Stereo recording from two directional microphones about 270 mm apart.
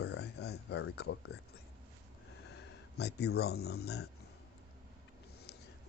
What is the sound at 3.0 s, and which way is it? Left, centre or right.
Speech, left.